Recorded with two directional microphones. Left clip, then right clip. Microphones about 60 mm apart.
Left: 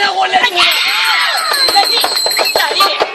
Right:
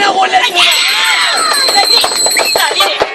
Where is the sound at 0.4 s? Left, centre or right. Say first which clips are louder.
Right 2 dB; right.